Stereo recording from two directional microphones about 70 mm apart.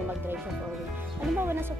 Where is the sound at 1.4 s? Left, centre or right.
Right.